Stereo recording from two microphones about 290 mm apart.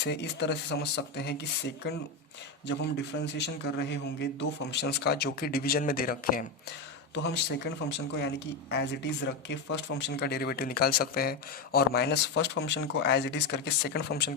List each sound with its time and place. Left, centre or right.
0.0 s speech: left